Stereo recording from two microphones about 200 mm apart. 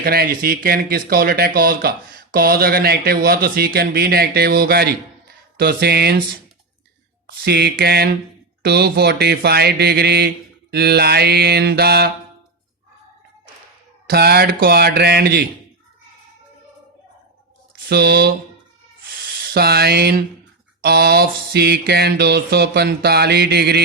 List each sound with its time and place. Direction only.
0.0 s mantra: 50° right (ahead or behind)
7.3 s mantra: 55° right (ahead or behind)
14.1 s mantra: 50° right (ahead or behind)
17.8 s mantra: 55° right (ahead or behind)
19.4 s speech: 50° right (ahead or behind)
20.8 s mantra: 50° right (ahead or behind)